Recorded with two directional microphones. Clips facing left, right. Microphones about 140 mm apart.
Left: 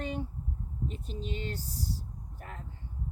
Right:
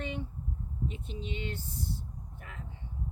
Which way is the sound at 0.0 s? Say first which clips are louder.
Left 2 dB; 40° left (ahead or behind).